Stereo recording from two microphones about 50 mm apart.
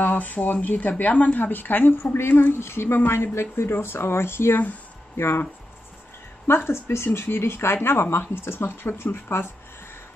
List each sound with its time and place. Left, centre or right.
0.0 s speech: left
2.1 s speech: left